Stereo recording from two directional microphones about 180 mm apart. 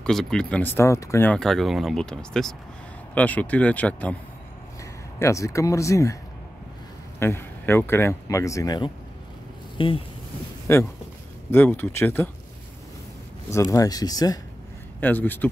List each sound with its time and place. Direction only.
0.0 s speech: 5° left (ahead or behind)
5.2 s speech: 15° left (ahead or behind)
7.2 s speech: 15° left (ahead or behind); by 10.0 s 30° left (ahead or behind)
10.7 s speech: 15° left (ahead or behind)
13.5 s speech: 15° left (ahead or behind)
15.0 s speech: 10° left (ahead or behind)